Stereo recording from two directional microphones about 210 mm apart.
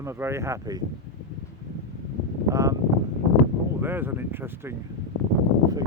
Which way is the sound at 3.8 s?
10° right (ahead or behind).